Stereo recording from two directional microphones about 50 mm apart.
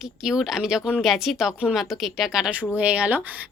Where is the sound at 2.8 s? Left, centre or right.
Right.